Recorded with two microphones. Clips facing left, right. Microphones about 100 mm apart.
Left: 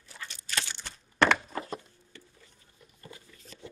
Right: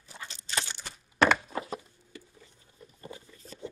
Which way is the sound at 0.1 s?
20° right (ahead or behind).